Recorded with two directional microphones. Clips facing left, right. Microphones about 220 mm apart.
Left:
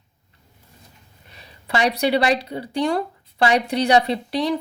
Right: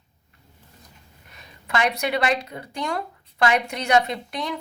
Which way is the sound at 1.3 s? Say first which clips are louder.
Left 2 dB; 30° left (ahead or behind).